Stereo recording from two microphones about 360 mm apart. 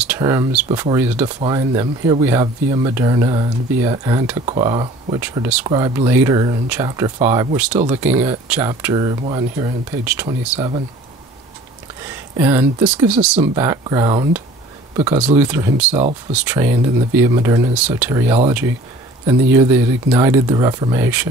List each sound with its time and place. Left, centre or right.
0.0 s speech: centre
12.4 s speech: centre
15.9 s speech: centre
16.4 s speech: centre